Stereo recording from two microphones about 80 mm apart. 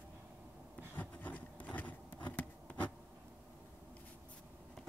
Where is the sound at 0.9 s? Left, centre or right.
Left.